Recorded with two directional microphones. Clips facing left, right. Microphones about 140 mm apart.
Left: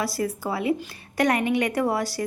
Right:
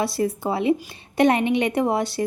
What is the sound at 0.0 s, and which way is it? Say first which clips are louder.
A woman's voice: right 4 dB; 25° right (ahead or behind).